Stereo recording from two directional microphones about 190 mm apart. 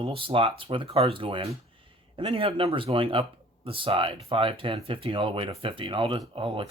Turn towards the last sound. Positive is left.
turn(degrees=-25)  # may be behind; listen again after turning